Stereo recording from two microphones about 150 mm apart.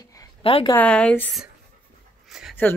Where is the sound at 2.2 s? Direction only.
Centre (ahead or behind).